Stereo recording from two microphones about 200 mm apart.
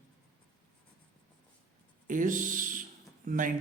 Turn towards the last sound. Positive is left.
turn(degrees=-40)  # may be behind; listen again after turning